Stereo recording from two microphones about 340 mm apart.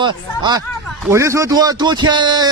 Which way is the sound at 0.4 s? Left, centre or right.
Centre.